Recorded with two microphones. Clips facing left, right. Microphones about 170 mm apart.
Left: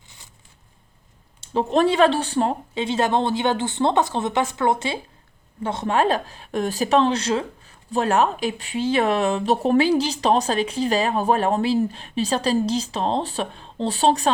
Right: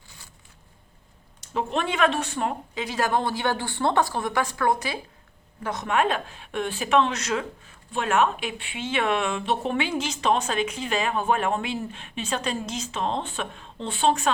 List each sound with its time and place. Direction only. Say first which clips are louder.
1.4 s speech: left 8 dB; 35° left (ahead or behind)